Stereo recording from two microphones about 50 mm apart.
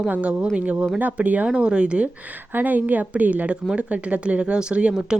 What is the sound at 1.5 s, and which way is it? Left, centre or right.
Speech, centre.